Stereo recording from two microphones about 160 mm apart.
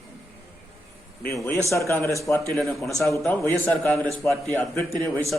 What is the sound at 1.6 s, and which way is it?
A man's voice, 20° left (ahead or behind).